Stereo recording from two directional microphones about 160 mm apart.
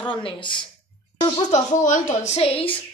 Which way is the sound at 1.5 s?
50° left (ahead or behind).